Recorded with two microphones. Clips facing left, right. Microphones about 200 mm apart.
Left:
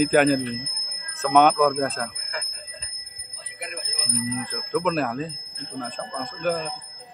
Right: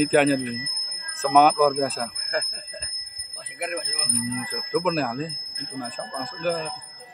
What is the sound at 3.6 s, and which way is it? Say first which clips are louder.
Music: right 6 dB; 60° right (ahead or behind).